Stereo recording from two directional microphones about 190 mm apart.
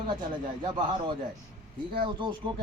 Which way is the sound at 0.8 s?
25° right (ahead or behind).